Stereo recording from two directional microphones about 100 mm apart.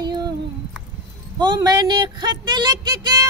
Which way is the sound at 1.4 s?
45° right (ahead or behind).